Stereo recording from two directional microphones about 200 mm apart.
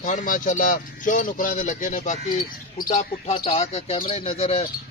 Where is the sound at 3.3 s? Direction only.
30° left (ahead or behind).